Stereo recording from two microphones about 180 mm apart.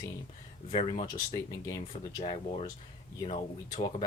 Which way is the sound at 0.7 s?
30° left (ahead or behind).